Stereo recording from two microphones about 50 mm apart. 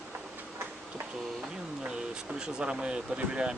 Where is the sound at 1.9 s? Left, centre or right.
Centre.